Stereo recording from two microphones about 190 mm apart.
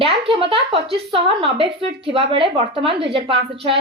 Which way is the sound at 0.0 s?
30° right (ahead or behind).